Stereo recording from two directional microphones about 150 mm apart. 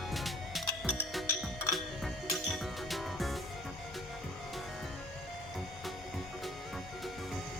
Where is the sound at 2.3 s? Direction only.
Centre (ahead or behind).